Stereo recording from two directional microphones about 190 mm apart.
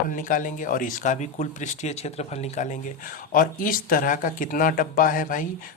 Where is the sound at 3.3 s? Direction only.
45° left (ahead or behind).